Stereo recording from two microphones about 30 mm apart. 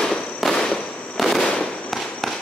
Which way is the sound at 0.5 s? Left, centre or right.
Centre.